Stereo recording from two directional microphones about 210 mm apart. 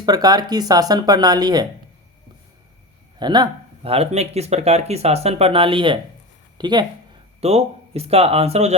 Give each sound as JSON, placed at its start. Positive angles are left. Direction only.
{"t": 0.0, "sound": "speech", "side_deg": -20}
{"t": 3.2, "sound": "speech", "side_deg": -20}